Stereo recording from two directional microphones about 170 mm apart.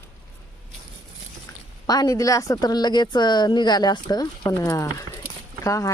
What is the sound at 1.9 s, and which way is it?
Speech, 20° left (ahead or behind).